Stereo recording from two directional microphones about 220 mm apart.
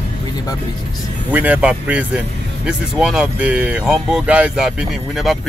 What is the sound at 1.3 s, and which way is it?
Speech, 5° right (ahead or behind).